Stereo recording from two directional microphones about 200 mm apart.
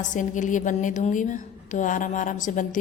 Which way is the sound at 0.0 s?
40° left (ahead or behind).